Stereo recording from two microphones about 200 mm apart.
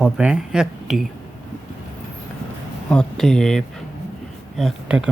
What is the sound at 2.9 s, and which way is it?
Speech, 5° left (ahead or behind).